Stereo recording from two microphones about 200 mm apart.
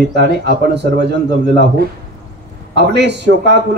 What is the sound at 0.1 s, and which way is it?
Speech, 55° right (ahead or behind).